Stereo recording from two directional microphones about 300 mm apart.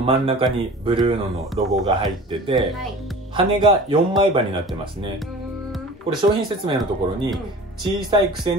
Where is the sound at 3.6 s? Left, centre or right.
Centre.